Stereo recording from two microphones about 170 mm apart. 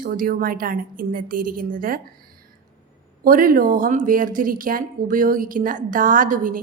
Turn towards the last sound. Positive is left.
turn(degrees=-50)  # may be behind; listen again after turning